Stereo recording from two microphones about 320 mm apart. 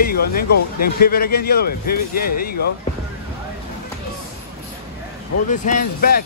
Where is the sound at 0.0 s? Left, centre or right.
Left.